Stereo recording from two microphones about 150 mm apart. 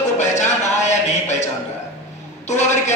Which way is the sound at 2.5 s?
50° left (ahead or behind).